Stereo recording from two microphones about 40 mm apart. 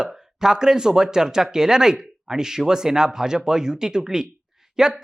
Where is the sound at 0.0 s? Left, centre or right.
Centre.